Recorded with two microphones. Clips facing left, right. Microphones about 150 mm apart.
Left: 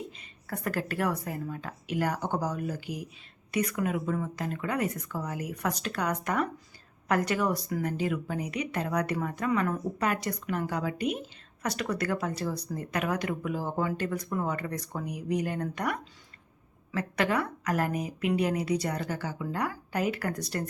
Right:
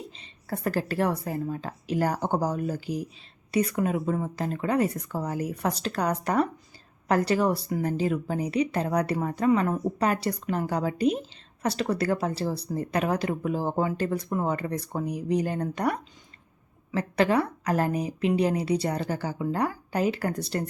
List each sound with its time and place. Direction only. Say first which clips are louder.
0.1 s a woman's voice: right 4 dB; 30° right (ahead or behind)